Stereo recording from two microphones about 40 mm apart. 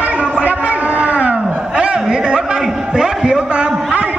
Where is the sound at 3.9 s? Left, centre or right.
Right.